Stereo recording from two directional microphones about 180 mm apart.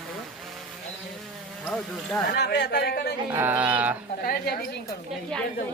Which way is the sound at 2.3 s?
65° left (ahead or behind).